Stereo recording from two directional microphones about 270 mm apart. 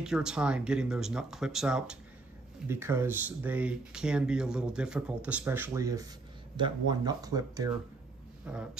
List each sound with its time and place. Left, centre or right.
0.0 s speech: centre